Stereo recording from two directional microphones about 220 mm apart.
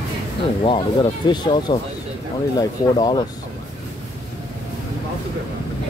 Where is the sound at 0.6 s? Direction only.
20° left (ahead or behind).